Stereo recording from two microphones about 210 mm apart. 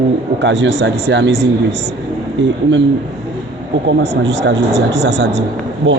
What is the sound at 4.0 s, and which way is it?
Speech, 55° right (ahead or behind).